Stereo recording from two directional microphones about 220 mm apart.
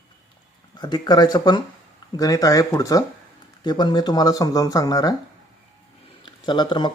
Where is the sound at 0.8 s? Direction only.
20° left (ahead or behind).